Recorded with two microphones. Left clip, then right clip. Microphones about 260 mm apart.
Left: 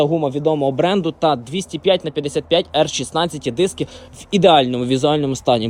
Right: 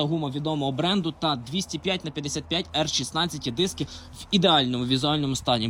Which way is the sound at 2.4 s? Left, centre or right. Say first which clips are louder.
Left 11 dB; right.